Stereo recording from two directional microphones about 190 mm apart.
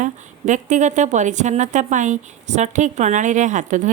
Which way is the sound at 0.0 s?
40° right (ahead or behind).